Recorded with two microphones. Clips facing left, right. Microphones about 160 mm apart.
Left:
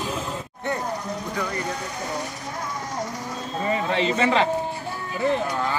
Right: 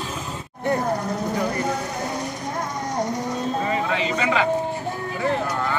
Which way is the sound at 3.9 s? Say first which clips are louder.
Left 1 dB; 30° left (ahead or behind).